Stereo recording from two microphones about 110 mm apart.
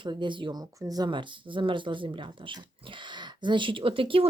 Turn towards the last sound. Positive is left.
turn(degrees=-55)  # may be behind; listen again after turning